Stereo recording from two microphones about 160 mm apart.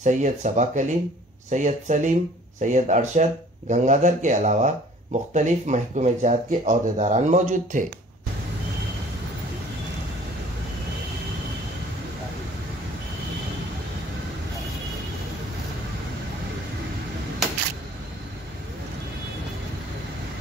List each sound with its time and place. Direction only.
0.0 s speech: 50° right (ahead or behind)